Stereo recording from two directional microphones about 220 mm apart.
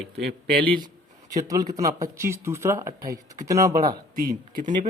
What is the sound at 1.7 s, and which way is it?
Speech, 15° right (ahead or behind).